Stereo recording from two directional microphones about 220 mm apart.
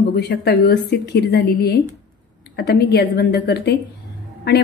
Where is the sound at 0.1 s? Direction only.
45° left (ahead or behind).